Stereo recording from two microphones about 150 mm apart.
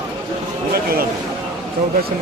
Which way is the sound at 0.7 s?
90° right.